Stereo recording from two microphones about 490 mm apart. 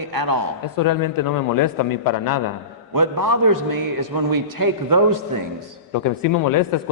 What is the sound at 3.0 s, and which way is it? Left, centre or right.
A man's voice, right.